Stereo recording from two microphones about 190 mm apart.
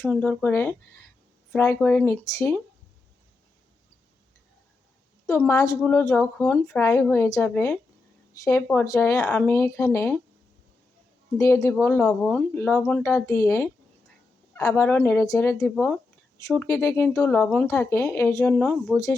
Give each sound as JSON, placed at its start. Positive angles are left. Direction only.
{"t": 0.1, "sound": "speech", "side_deg": 10}
{"t": 5.2, "sound": "speech", "side_deg": 15}
{"t": 11.3, "sound": "speech", "side_deg": 15}